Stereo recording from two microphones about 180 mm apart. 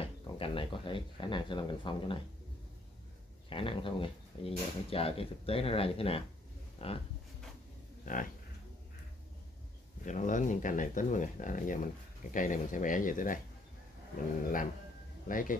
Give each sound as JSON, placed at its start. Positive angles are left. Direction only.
{"t": 0.0, "sound": "speech", "side_deg": 30}
{"t": 3.4, "sound": "speech", "side_deg": 30}
{"t": 8.0, "sound": "a sound", "side_deg": 45}
{"t": 10.0, "sound": "speech", "side_deg": 45}
{"t": 15.2, "sound": "speech", "side_deg": 50}